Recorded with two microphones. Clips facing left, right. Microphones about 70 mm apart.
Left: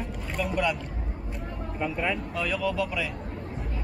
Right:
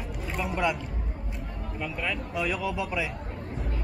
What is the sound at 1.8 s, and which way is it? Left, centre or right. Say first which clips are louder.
Speech: left 4 dB; centre.